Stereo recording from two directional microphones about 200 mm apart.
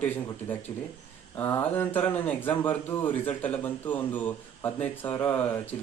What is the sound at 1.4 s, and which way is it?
Speech, 10° left (ahead or behind).